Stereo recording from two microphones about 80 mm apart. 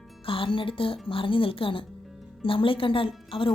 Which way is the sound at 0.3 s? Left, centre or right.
Left.